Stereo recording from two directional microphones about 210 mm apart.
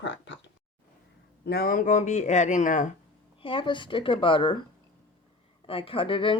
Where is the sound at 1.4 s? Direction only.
45° left (ahead or behind).